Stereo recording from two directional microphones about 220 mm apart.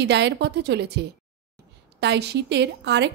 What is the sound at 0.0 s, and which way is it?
Speech, 50° right (ahead or behind).